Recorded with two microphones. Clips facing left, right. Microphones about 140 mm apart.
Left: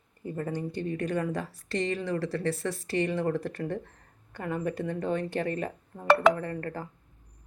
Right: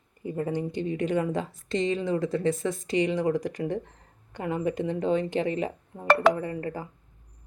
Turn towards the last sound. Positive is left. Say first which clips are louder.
# right 2 dB
turn(degrees=-10)  # may be behind; listen again after turning